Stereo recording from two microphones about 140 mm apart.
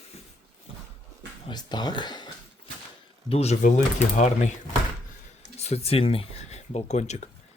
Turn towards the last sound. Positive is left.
turn(degrees=55)  # may be behind; listen again after turning